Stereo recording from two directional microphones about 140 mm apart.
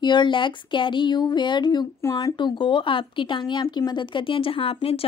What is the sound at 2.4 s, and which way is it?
Speech, 35° left (ahead or behind).